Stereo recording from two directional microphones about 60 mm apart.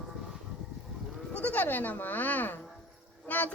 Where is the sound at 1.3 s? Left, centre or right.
Left.